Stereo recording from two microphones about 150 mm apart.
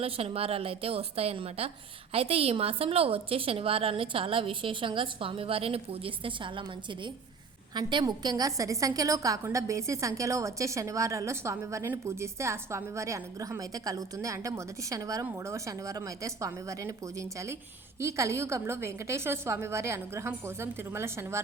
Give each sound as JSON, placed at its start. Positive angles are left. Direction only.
{"t": 0.0, "sound": "a woman's voice", "side_deg": -40}